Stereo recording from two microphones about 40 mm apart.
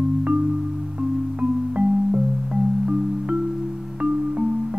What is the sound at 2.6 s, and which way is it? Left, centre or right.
Music, centre.